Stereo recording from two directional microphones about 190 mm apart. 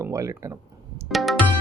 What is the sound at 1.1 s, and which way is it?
Music, centre (ahead or behind).